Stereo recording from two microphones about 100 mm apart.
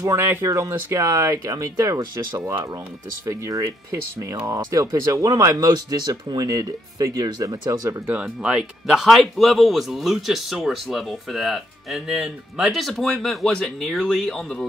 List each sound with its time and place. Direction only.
0.0 s speech: 25° right (ahead or behind)
8.1 s speech: 10° right (ahead or behind); by 14.7 s 5° left (ahead or behind)